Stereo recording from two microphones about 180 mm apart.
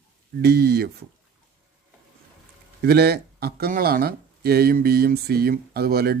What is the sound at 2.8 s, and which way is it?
Speech, 65° right (ahead or behind).